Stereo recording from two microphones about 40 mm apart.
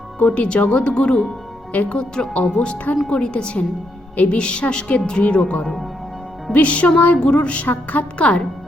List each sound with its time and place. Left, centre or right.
0.2 s a woman's voice: left
1.7 s speech: left
2.0 s a woman's voice: left
7.2 s a woman's voice: left